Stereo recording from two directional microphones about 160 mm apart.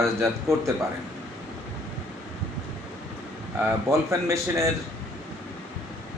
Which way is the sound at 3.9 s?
20° right (ahead or behind).